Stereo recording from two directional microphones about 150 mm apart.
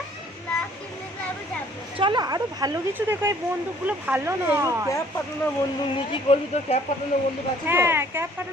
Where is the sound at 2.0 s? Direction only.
30° right (ahead or behind).